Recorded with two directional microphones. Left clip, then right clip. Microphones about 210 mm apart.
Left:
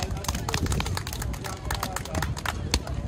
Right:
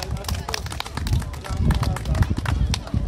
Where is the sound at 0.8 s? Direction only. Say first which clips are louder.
Right 1 dB; centre (ahead or behind).